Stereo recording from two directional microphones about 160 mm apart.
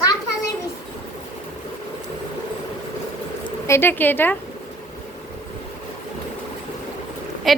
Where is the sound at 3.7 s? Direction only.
15° left (ahead or behind).